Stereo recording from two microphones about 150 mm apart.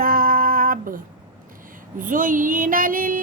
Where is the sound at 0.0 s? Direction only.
75° right (ahead or behind).